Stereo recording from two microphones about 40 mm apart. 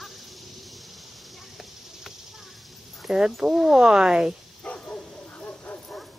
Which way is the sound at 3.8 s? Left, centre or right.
Centre.